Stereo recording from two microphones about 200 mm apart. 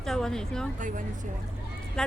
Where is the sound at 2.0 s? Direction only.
5° left (ahead or behind).